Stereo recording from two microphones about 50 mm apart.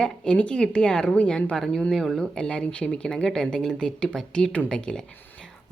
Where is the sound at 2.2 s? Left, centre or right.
Centre.